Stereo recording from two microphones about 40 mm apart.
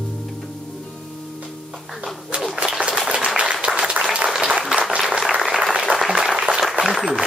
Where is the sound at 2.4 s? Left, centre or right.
Centre.